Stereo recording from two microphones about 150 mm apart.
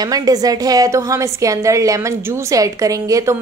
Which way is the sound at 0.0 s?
25° right (ahead or behind).